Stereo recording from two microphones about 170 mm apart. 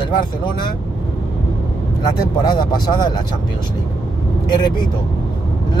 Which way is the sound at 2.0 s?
25° left (ahead or behind).